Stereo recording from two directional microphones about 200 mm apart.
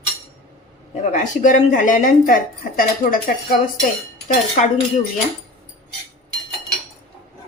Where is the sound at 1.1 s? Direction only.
40° left (ahead or behind).